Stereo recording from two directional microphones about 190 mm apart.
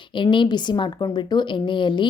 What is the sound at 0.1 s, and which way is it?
A woman's voice, 25° left (ahead or behind).